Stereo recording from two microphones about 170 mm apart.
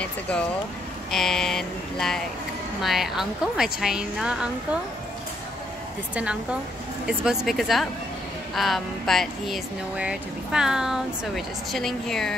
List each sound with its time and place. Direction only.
0.0 s speech: 5° left (ahead or behind)
7.1 s speech: centre (ahead or behind)